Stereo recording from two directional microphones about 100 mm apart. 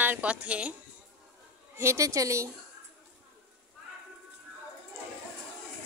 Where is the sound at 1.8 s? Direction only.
30° right (ahead or behind).